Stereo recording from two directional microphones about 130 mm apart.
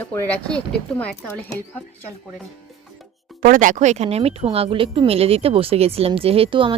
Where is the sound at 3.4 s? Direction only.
85° right; by 6.7 s 40° right (ahead or behind).